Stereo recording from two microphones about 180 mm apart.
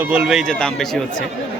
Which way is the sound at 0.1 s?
5° right (ahead or behind).